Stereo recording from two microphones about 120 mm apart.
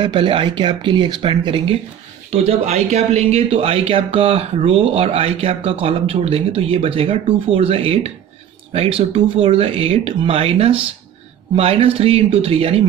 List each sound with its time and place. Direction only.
0.0 s speech: 40° right (ahead or behind)
2.3 s speech: 65° right (ahead or behind)